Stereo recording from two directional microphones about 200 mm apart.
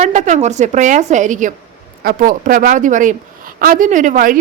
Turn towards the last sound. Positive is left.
turn(degrees=-40)  # may be behind; listen again after turning